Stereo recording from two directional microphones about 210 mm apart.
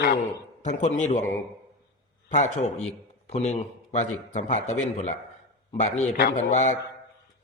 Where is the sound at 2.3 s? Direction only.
35° left (ahead or behind).